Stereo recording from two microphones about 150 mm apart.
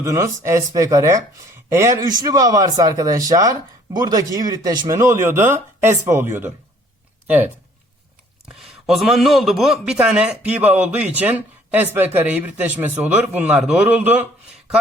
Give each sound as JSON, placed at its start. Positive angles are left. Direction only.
{"t": 0.0, "sound": "a man's voice", "side_deg": -20}
{"t": 8.4, "sound": "a man's voice", "side_deg": 0}